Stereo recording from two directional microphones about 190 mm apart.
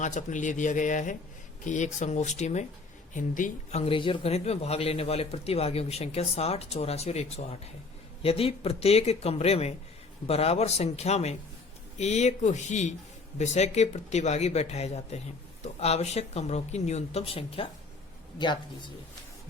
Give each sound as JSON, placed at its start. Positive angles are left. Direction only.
{"t": 0.0, "sound": "speech", "side_deg": 40}